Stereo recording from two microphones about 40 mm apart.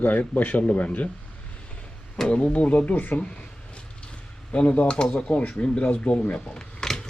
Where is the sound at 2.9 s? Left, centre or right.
Left.